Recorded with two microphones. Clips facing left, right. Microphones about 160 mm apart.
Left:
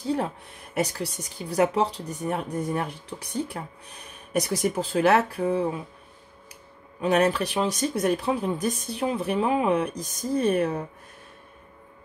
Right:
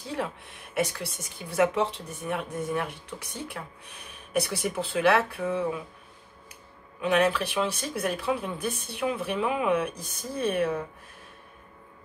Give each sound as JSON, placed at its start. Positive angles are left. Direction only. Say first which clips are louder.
{"t": 0.1, "sound": "speech", "louder": "left 5 dB", "side_deg": 40}
{"t": 7.0, "sound": "speech", "louder": "left 2 dB", "side_deg": 40}